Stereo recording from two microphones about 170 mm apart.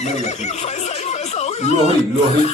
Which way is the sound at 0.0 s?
40° left (ahead or behind).